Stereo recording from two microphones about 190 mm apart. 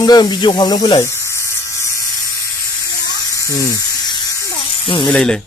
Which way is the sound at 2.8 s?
15° left (ahead or behind).